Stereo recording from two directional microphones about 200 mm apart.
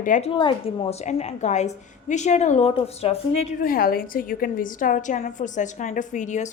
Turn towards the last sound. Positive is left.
turn(degrees=40)  # may be behind; listen again after turning